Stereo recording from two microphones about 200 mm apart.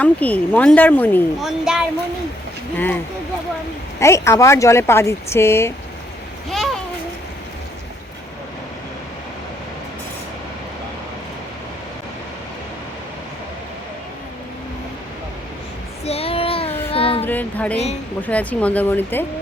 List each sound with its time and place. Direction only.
0.0 s a woman's voice: 5° left (ahead or behind)
2.7 s a woman's voice: 10° left (ahead or behind)
4.0 s a woman's voice: 15° left (ahead or behind)
6.5 s babbling: centre (ahead or behind)
16.0 s child singing: 30° left (ahead or behind)
17.2 s a woman's voice: 10° left (ahead or behind)